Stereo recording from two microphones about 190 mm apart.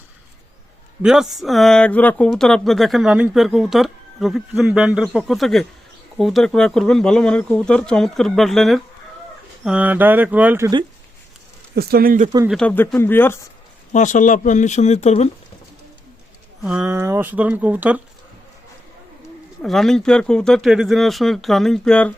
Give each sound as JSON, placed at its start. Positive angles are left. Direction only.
{"t": 1.0, "sound": "speech", "side_deg": -5}
{"t": 11.7, "sound": "speech", "side_deg": -55}
{"t": 12.5, "sound": "speech", "side_deg": 5}
{"t": 13.9, "sound": "speech", "side_deg": 40}
{"t": 16.6, "sound": "speech", "side_deg": -5}
{"t": 19.6, "sound": "speech", "side_deg": 0}